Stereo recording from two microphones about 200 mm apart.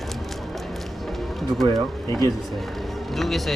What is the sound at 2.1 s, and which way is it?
Speech, 15° left (ahead or behind).